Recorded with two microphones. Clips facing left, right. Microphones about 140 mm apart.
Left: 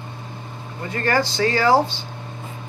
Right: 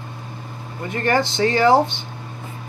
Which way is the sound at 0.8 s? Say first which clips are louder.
Right 1 dB; 20° right (ahead or behind).